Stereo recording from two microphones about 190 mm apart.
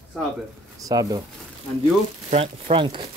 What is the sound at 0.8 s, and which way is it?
Speech, 20° right (ahead or behind).